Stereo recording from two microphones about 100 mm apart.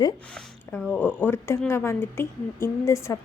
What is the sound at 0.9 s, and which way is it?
A woman's voice, 20° left (ahead or behind).